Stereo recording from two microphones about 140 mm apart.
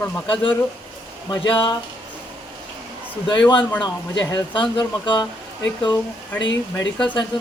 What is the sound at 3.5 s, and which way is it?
Speech, 35° left (ahead or behind).